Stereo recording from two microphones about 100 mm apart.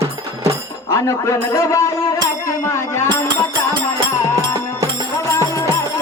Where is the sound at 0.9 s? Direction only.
25° left (ahead or behind).